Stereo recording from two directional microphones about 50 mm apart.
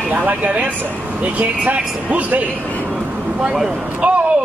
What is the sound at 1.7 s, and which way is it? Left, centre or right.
Speech, right.